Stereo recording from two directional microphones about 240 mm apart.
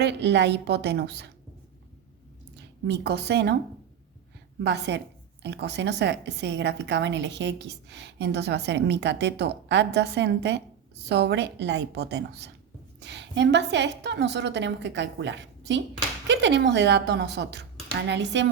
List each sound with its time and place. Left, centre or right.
0.0 s a woman's voice: right
2.8 s a woman's voice: right
4.6 s a woman's voice: right